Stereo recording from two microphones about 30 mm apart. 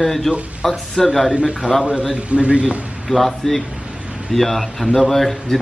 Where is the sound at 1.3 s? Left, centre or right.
Right.